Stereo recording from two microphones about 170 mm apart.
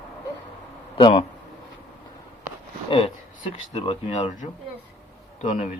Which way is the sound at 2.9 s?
30° left (ahead or behind).